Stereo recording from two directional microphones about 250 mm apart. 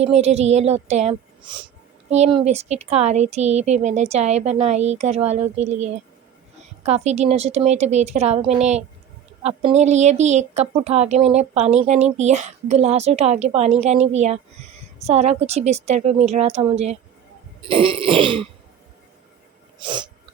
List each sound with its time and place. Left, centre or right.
0.0 s speech: right
19.8 s sneeze: centre